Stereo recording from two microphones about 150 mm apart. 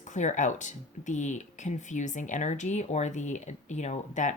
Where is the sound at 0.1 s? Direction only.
55° left (ahead or behind).